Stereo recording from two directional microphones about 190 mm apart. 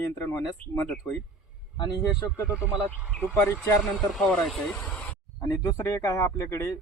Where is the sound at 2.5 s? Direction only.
10° right (ahead or behind).